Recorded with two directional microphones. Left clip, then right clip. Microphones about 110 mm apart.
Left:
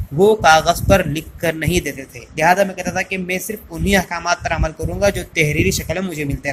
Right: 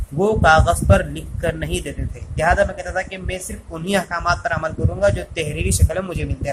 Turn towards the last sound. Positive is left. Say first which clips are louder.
# left 2 dB
turn(degrees=15)  # may be behind; listen again after turning